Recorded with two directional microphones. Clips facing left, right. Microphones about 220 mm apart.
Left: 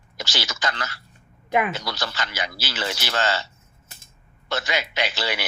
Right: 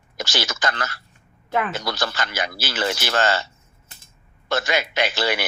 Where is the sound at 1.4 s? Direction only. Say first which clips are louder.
Left 2 dB; 15° left (ahead or behind).